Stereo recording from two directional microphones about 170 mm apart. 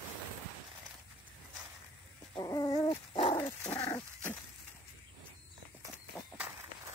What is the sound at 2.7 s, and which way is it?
Dog, 35° left (ahead or behind).